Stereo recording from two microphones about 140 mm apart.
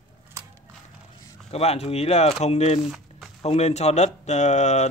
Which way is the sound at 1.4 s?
50° left (ahead or behind).